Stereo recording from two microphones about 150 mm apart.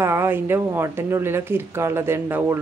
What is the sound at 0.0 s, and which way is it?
Speech, 15° right (ahead or behind).